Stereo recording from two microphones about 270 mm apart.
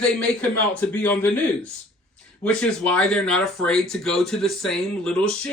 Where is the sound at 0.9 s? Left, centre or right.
Centre.